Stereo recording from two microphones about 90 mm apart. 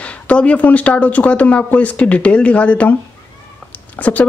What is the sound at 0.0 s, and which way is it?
Speech, 15° left (ahead or behind).